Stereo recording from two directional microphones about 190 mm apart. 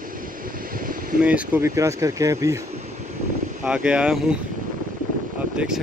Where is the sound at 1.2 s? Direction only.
5° right (ahead or behind).